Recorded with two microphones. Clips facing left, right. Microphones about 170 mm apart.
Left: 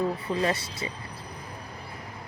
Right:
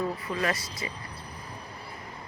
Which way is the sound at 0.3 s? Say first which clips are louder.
Left 3 dB; 30° left (ahead or behind).